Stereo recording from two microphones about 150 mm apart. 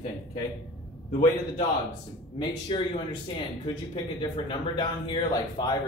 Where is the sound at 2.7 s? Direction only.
35° left (ahead or behind).